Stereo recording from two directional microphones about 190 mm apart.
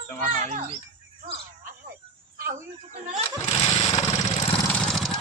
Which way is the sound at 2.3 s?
45° right (ahead or behind).